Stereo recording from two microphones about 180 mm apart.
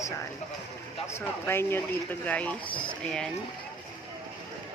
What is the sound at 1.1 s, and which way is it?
A woman's voice, 15° left (ahead or behind).